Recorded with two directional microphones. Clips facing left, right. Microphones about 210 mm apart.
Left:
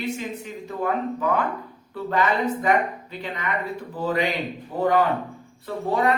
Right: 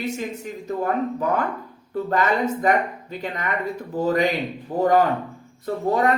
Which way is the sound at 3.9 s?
45° right (ahead or behind).